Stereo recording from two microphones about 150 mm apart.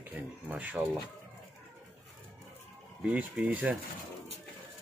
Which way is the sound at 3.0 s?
10° right (ahead or behind).